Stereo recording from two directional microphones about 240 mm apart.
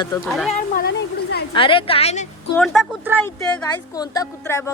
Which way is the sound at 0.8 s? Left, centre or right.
Left.